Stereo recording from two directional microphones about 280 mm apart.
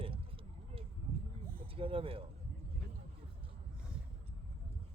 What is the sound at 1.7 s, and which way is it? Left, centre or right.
Speech, centre.